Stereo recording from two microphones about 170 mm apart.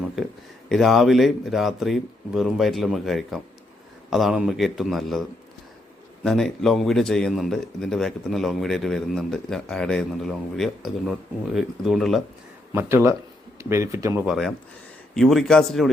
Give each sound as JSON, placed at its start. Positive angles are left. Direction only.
{"t": 0.2, "sound": "speech", "side_deg": 0}
{"t": 6.2, "sound": "speech", "side_deg": 0}
{"t": 12.7, "sound": "speech", "side_deg": -15}
{"t": 14.3, "sound": "speech", "side_deg": 0}